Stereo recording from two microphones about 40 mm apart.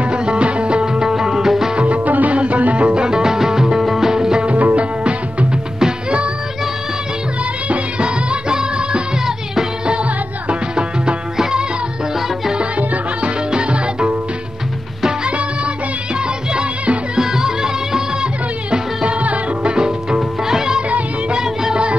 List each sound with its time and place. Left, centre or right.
0.0 s music: right
1.0 s music: centre
1.8 s music: right; by 4.5 s centre
4.5 s music: right
5.8 s music: right
7.7 s music: right
10.5 s music: right
12.5 s music: right
15.2 s music of bollywood: right
16.5 s music: right
17.2 s music: centre; by 19.7 s right
19.7 s music: centre